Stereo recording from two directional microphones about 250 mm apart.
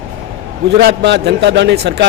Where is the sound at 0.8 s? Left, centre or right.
Right.